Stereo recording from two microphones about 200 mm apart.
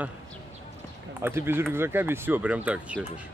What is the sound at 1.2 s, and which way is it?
Speech, 10° right (ahead or behind).